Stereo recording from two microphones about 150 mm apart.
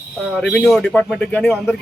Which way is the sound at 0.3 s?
Centre (ahead or behind).